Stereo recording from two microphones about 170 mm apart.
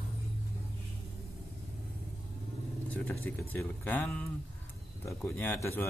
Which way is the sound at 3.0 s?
10° left (ahead or behind).